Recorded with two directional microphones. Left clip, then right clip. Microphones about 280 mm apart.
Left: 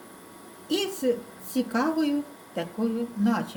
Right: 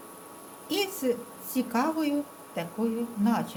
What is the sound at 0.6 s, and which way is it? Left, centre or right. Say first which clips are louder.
A woman's voice: left 2 dB; centre.